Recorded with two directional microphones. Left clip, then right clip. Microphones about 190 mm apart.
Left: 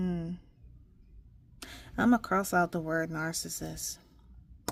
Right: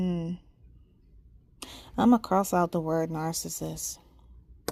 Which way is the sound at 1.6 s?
15° right (ahead or behind).